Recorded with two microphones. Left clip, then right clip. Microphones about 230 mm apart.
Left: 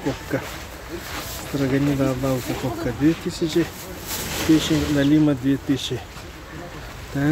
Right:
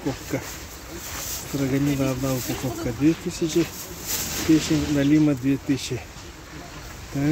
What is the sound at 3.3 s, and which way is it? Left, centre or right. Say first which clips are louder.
Speech: left 1 dB; centre.